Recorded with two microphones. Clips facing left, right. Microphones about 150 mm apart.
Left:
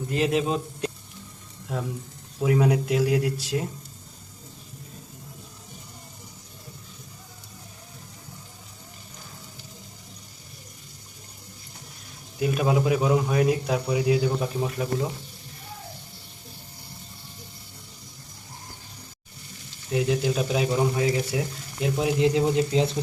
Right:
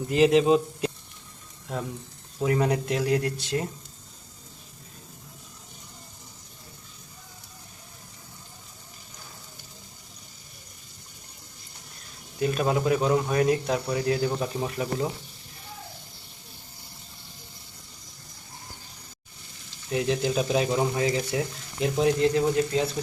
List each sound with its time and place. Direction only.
0.1 s speech: centre (ahead or behind)
2.4 s speech: 5° left (ahead or behind)
12.4 s speech: 5° left (ahead or behind)
19.9 s speech: 5° left (ahead or behind)
22.2 s speech: 15° left (ahead or behind)